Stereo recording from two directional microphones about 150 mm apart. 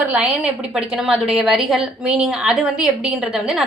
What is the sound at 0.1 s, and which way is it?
A woman's voice, 10° right (ahead or behind).